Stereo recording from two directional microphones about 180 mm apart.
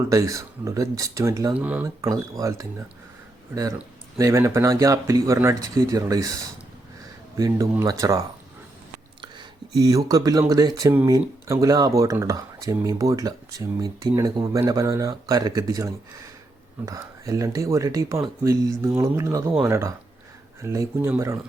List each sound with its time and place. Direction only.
0.1 s speech: 15° right (ahead or behind)
9.2 s speech: 25° right (ahead or behind)